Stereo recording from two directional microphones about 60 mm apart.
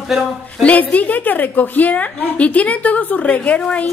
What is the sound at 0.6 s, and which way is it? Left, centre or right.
A woman's voice, left.